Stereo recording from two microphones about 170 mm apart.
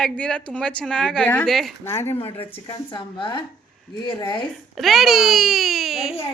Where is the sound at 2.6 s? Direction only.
25° left (ahead or behind).